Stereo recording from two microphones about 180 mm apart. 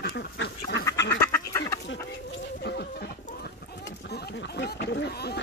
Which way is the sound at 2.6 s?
65° left (ahead or behind).